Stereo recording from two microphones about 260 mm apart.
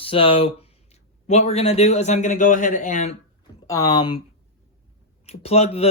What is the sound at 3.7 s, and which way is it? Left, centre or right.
Speech, centre.